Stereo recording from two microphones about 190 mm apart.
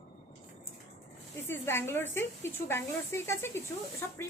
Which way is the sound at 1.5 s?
10° left (ahead or behind).